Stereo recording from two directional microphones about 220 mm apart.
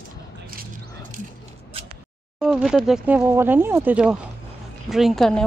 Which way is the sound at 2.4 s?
5° right (ahead or behind).